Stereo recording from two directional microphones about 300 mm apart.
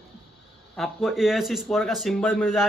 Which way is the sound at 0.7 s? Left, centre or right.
Centre.